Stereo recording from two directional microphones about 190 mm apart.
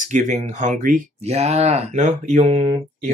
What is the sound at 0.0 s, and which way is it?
Speech, 40° right (ahead or behind).